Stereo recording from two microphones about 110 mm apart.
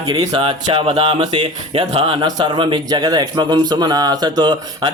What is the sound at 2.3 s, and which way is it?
A man's voice, 40° right (ahead or behind).